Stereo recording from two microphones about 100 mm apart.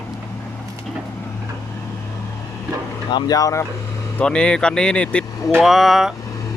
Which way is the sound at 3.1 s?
40° left (ahead or behind).